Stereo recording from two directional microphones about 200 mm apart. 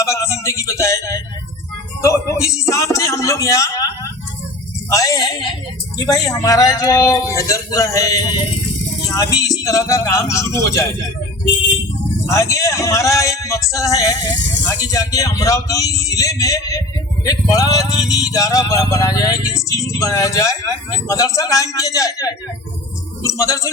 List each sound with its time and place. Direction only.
0.0 s speech: 15° left (ahead or behind)
4.9 s speech: 15° left (ahead or behind)
12.2 s speech: 15° left (ahead or behind)